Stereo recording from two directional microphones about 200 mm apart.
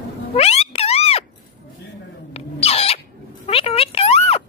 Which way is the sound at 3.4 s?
30° left (ahead or behind).